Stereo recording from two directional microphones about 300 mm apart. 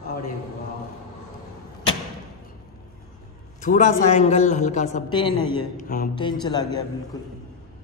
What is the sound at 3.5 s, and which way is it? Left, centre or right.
A man's voice, left.